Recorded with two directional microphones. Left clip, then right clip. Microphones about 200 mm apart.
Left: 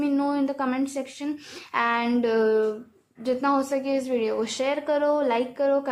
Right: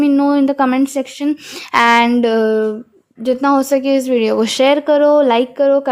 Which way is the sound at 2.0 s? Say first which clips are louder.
Right 8 dB; 35° right (ahead or behind).